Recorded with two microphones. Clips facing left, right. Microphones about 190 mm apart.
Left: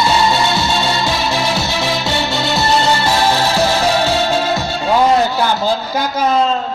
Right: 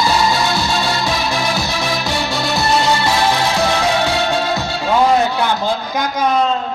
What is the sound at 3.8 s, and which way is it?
Music, 30° left (ahead or behind).